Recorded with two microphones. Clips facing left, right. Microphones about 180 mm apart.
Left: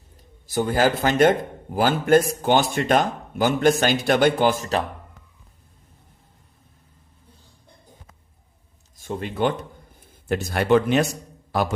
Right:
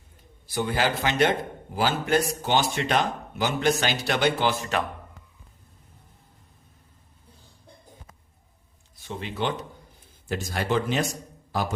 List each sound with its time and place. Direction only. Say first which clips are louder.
0.4 s a man's voice: left 5 dB; 45° left (ahead or behind)
9.0 s a man's voice: left 6 dB; 50° left (ahead or behind); by 11.7 s 65° left (ahead or behind)